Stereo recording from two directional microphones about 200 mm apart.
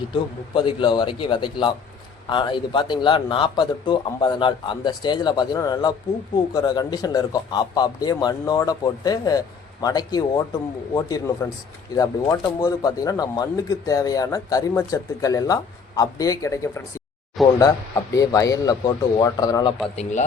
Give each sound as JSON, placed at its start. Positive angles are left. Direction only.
{"t": 0.1, "sound": "a man's voice", "side_deg": 25}
{"t": 20.0, "sound": "speech", "side_deg": 35}